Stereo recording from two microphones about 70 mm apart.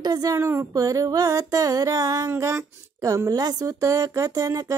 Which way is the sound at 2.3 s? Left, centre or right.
Right.